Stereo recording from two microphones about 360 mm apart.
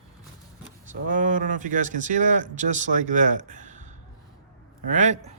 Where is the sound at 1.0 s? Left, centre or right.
Right.